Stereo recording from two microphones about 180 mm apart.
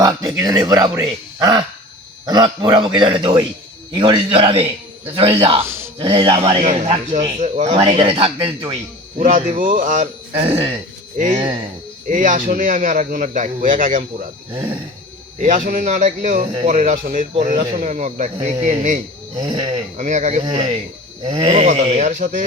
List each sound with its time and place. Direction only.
0.0 s speech: 20° right (ahead or behind); by 7.7 s 40° right (ahead or behind)
7.7 s speech: 30° right (ahead or behind)
9.1 s a man's voice: 45° right (ahead or behind)
11.2 s a man's voice: 45° right (ahead or behind)
15.4 s a man's voice: 45° right (ahead or behind)
16.5 s speech: 25° right (ahead or behind)
16.7 s a man's voice: 45° right (ahead or behind)
19.4 s speech: 25° right (ahead or behind)
20.0 s a man's voice: 40° right (ahead or behind)
20.4 s speech: 25° right (ahead or behind); by 22.3 s 45° right (ahead or behind)